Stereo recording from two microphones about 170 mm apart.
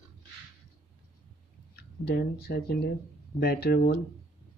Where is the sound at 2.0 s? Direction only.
70° left (ahead or behind).